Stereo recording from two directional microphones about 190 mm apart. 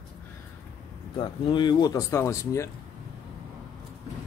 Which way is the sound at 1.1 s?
25° left (ahead or behind).